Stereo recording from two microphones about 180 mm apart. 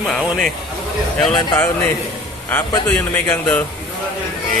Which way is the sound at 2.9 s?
5° left (ahead or behind).